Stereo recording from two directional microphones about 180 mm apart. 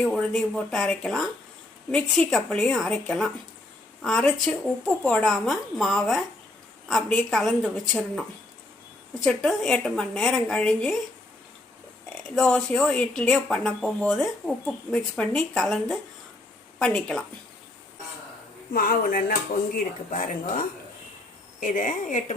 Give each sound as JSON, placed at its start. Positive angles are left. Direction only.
{"t": 0.0, "sound": "speech", "side_deg": 5}
{"t": 9.2, "sound": "speech", "side_deg": 5}
{"t": 12.4, "sound": "speech", "side_deg": 5}
{"t": 18.7, "sound": "speech", "side_deg": 50}
{"t": 21.6, "sound": "speech", "side_deg": 45}